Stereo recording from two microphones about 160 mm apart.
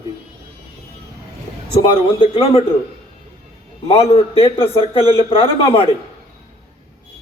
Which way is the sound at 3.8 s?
35° left (ahead or behind).